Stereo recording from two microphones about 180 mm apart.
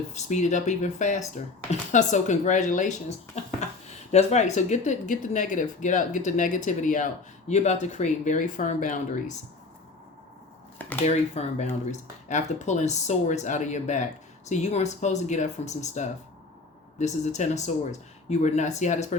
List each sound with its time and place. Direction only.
0.1 s speech: 40° left (ahead or behind)
11.0 s speech: 40° left (ahead or behind)